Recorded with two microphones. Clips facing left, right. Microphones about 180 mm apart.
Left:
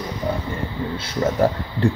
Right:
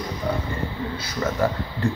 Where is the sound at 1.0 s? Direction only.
30° left (ahead or behind).